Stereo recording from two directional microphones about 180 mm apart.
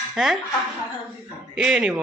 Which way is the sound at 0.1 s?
Centre (ahead or behind).